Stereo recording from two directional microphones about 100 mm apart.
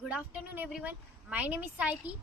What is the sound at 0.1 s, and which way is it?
A woman's voice, 15° right (ahead or behind).